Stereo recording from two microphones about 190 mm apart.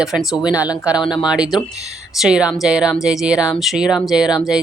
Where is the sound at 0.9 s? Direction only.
20° left (ahead or behind).